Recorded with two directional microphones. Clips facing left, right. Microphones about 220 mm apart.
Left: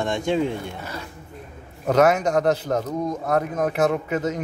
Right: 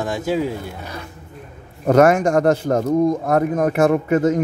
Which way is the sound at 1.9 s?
50° right (ahead or behind).